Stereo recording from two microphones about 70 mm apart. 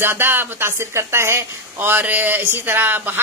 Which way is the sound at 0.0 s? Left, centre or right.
Right.